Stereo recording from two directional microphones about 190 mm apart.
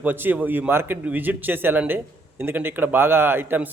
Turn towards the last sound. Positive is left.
turn(degrees=-10)  # may be behind; listen again after turning